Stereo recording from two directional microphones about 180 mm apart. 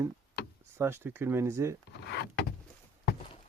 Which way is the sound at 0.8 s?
10° right (ahead or behind).